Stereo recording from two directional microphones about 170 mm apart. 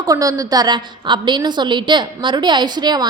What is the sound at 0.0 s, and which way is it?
A woman's voice, 20° right (ahead or behind).